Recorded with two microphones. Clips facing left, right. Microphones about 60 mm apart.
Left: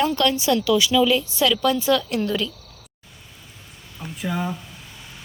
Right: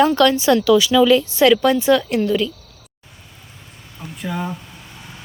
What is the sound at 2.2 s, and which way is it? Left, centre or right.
Speech, centre.